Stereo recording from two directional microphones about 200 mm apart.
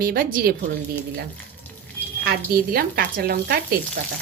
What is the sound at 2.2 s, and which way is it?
A woman's voice, 50° right (ahead or behind).